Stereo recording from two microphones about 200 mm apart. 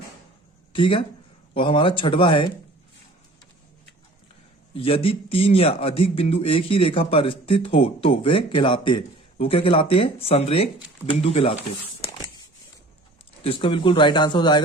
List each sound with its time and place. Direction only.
0.7 s speech: 25° left (ahead or behind)
4.7 s speech: 30° left (ahead or behind)
13.4 s speech: 25° left (ahead or behind)